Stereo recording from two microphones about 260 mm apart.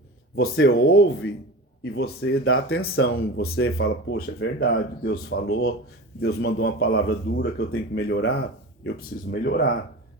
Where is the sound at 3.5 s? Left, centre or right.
Left.